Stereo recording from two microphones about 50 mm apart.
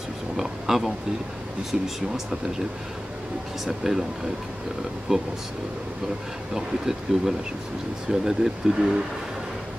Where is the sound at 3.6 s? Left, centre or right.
Centre.